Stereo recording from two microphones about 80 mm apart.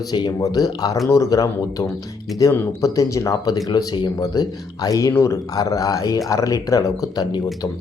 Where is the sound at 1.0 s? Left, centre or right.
Left.